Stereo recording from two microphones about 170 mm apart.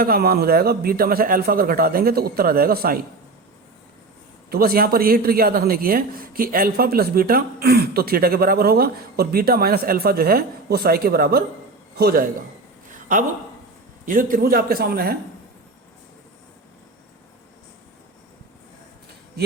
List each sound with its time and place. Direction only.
0.0 s speech: 60° right (ahead or behind)
4.4 s a man's voice: 60° right (ahead or behind)
14.0 s speech: 55° right (ahead or behind)